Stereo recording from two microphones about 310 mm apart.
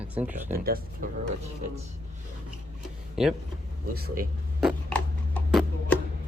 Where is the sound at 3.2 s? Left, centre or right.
Centre.